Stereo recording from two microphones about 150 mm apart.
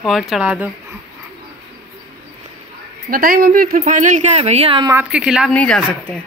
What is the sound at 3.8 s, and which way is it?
Speech, 55° right (ahead or behind).